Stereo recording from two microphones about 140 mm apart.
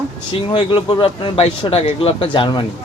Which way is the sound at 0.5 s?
40° left (ahead or behind).